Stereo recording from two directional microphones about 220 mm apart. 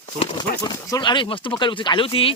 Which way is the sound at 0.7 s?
15° left (ahead or behind).